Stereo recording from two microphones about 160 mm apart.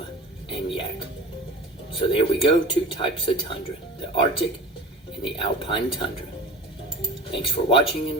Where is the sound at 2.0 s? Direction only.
35° left (ahead or behind).